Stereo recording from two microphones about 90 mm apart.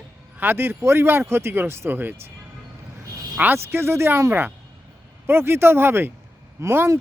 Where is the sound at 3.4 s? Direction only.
20° right (ahead or behind).